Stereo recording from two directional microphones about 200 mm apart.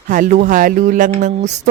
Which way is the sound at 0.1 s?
40° right (ahead or behind).